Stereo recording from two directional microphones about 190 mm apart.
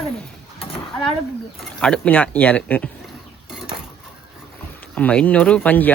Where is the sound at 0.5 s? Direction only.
30° left (ahead or behind).